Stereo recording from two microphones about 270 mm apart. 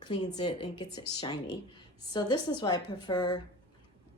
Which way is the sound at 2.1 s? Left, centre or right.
Centre.